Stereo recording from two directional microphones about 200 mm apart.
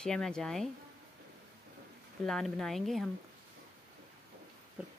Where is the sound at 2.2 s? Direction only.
Centre (ahead or behind).